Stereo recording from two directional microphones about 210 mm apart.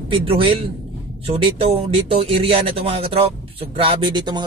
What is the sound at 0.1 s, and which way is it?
Speech, 25° right (ahead or behind).